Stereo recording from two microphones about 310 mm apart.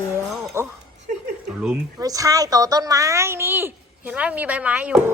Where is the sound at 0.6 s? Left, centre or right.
Centre.